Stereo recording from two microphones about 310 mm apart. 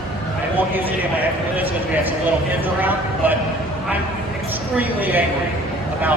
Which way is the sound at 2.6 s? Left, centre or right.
Centre.